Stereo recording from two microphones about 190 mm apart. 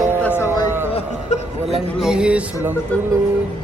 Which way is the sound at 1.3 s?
35° left (ahead or behind).